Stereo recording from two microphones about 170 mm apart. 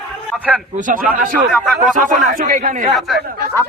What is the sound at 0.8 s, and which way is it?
A man's voice, 50° right (ahead or behind).